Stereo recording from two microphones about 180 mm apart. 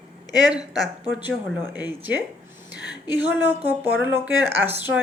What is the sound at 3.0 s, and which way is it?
Speech, 10° right (ahead or behind).